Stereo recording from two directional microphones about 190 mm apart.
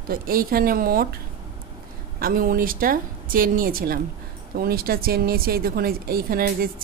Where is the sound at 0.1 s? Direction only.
50° right (ahead or behind).